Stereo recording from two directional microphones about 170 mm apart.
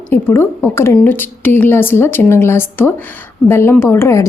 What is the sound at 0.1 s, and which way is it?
Speech, 15° left (ahead or behind).